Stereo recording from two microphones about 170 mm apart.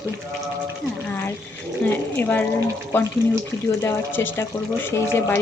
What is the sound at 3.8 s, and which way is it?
Speech, 15° left (ahead or behind).